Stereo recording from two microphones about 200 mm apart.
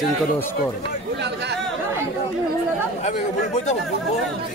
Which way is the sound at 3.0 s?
35° left (ahead or behind).